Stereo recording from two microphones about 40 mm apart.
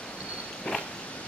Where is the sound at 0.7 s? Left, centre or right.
Left.